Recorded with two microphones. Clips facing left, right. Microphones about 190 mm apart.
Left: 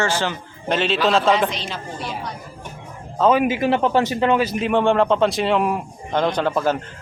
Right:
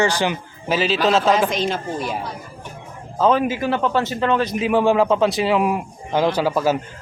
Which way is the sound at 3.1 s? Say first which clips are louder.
Even; centre (ahead or behind).